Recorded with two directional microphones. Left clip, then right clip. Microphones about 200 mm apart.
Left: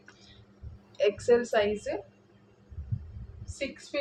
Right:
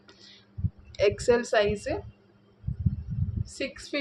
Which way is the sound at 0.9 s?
60° right (ahead or behind).